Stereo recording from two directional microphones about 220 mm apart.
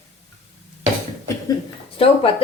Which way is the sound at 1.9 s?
25° left (ahead or behind).